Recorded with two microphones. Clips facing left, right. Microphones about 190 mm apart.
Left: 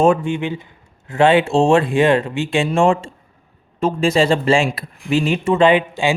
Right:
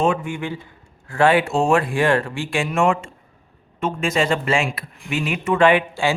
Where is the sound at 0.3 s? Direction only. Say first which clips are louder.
Left 5 dB; 20° left (ahead or behind).